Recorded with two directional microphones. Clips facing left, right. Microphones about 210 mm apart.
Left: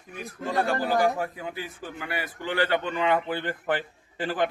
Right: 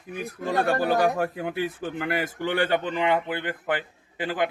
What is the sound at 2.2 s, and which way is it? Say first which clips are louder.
Speech: right 2 dB; 45° right (ahead or behind).